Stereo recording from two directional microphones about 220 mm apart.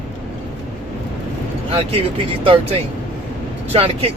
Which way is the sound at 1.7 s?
25° right (ahead or behind).